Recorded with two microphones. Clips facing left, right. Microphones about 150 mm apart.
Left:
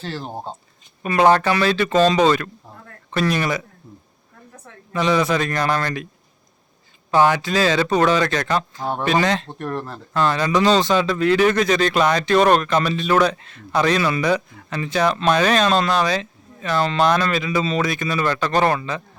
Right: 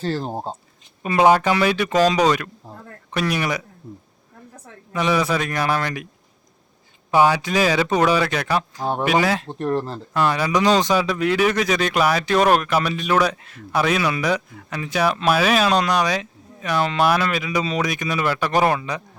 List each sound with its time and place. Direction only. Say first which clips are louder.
0.0 s speech: right 4 dB; 40° right (ahead or behind)
1.0 s speech: even; 15° right (ahead or behind)
4.9 s speech: left 2 dB; 10° right (ahead or behind)
7.1 s speech: even; 10° right (ahead or behind)
9.6 s speech: right 4 dB; 30° right (ahead or behind)
10.1 s speech: left 1 dB; 10° right (ahead or behind)